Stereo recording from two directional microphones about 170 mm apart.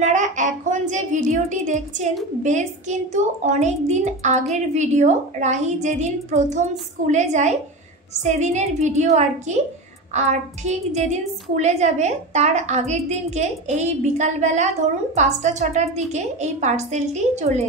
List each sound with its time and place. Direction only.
0.0 s a child's voice: 45° right (ahead or behind)